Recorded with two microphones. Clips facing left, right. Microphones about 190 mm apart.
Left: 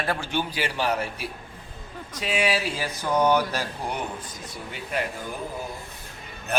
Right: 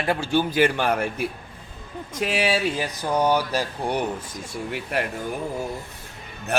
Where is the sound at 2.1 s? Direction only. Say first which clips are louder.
Right 2 dB; 40° right (ahead or behind).